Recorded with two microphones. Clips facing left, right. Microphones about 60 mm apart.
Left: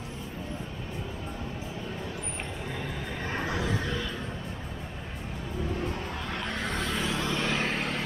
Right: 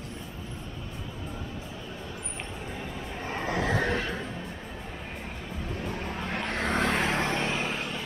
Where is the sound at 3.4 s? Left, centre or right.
Right.